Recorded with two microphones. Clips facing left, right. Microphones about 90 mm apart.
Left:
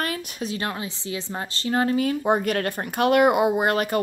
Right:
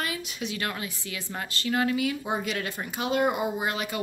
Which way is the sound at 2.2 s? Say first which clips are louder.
Left 8 dB; 55° left (ahead or behind).